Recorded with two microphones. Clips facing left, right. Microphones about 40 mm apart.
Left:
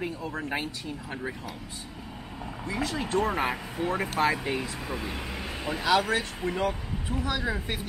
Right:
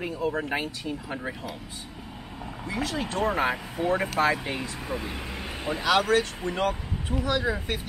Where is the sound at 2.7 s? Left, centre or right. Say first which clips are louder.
Even; centre.